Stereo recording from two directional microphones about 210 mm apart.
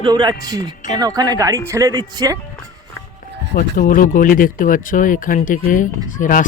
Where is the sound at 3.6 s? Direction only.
40° left (ahead or behind).